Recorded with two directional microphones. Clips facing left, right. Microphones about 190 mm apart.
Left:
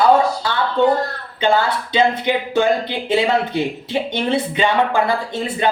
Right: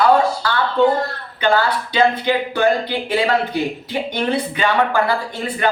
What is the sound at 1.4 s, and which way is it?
Speech, 20° left (ahead or behind).